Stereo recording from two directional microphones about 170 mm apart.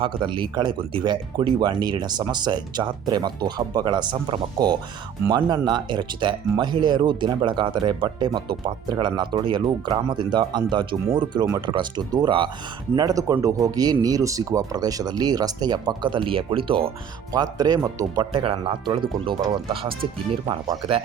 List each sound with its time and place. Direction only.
0.0 s speech: 30° right (ahead or behind)
18.3 s speech: 30° right (ahead or behind)